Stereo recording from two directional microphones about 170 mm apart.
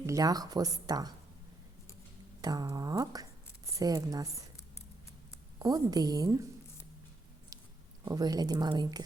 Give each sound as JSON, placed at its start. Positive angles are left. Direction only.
{"t": 0.0, "sound": "speech", "side_deg": -20}
{"t": 2.4, "sound": "a woman's voice", "side_deg": -20}
{"t": 5.5, "sound": "speech", "side_deg": -20}
{"t": 8.0, "sound": "speech", "side_deg": -20}